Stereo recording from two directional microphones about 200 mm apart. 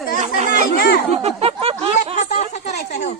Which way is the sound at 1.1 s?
30° right (ahead or behind).